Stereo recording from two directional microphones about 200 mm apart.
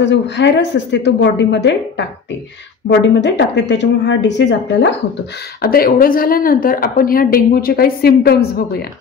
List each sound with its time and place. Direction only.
0.0 s a woman's voice: 60° left (ahead or behind)
5.6 s a woman's voice: 50° left (ahead or behind)